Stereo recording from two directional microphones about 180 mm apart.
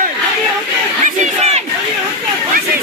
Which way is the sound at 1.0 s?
40° right (ahead or behind).